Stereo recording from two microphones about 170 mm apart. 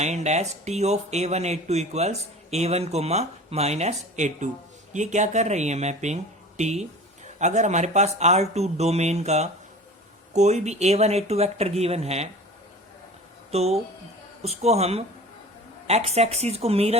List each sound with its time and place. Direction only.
0.0 s speech: 40° right (ahead or behind)
13.5 s speech: 40° right (ahead or behind)